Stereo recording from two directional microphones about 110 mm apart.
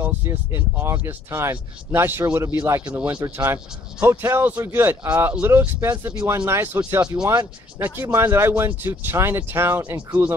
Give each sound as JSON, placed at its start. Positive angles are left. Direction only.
{"t": 0.0, "sound": "speech", "side_deg": -25}
{"t": 2.9, "sound": "speech", "side_deg": -10}
{"t": 4.0, "sound": "speech", "side_deg": -25}